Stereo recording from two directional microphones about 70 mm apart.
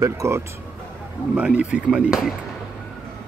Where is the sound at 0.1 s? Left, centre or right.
Right.